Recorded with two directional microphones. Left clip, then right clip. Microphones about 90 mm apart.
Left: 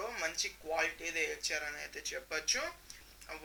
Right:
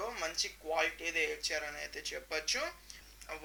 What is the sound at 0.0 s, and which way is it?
Speech, 30° right (ahead or behind).